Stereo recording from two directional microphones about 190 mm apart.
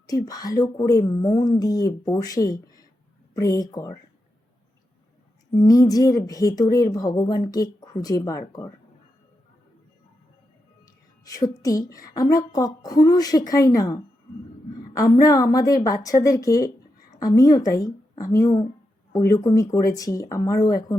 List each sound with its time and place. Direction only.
0.1 s speech: 20° left (ahead or behind)
5.5 s speech: 20° left (ahead or behind)
11.3 s a woman's voice: 20° left (ahead or behind)